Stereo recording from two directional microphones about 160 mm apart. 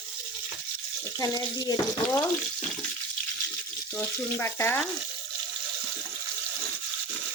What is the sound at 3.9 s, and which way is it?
Frying, 15° left (ahead or behind).